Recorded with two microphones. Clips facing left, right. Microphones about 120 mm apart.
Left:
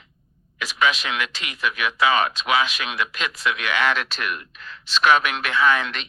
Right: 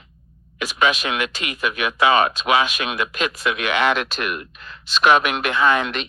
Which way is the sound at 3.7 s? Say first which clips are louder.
Right 4 dB; 15° right (ahead or behind).